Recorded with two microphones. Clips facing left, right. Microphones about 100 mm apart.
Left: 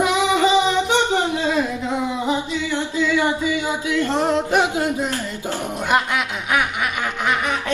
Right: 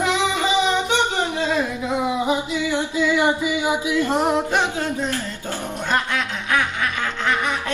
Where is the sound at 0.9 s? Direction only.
15° left (ahead or behind).